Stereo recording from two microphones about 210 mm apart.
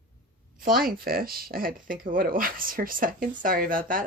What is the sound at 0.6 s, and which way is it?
Speech, 45° right (ahead or behind).